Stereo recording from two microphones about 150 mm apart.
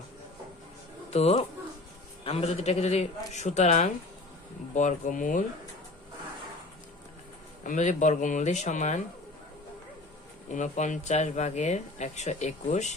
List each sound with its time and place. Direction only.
1.1 s speech: 45° left (ahead or behind); by 5.4 s 60° left (ahead or behind)
7.6 s speech: 55° left (ahead or behind)
10.5 s speech: 55° left (ahead or behind)